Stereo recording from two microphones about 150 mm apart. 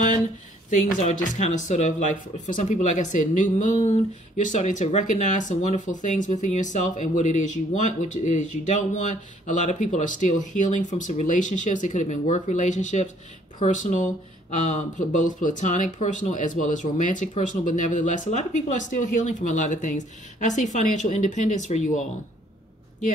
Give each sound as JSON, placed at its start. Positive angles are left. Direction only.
{"t": 0.7, "sound": "speech", "side_deg": 55}